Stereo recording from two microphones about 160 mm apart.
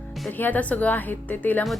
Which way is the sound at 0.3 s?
10° left (ahead or behind).